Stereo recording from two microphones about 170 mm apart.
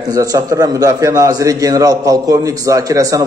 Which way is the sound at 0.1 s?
20° right (ahead or behind).